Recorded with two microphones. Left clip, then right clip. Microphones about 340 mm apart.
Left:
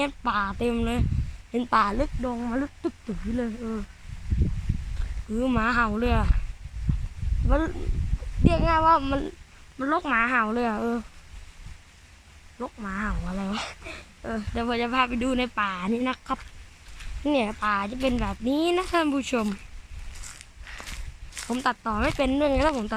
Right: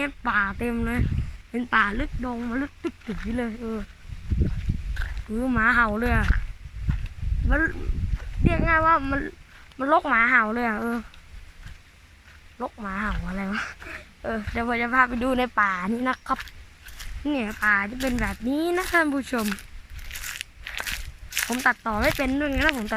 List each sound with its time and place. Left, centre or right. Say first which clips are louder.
0.0 s speech: right 2 dB; centre
2.2 s speech: left 1 dB; centre
5.3 s speech: right 3 dB; centre
7.4 s speech: right 2 dB; centre
12.5 s speech: right 2 dB; centre
14.2 s speech: right 3 dB; centre
20.1 s a sound: right 11 dB; right
21.5 s speech: right 2 dB; centre